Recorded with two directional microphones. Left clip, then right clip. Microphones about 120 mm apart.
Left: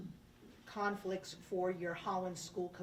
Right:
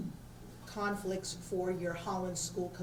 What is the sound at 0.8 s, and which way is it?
Speech, 30° left (ahead or behind).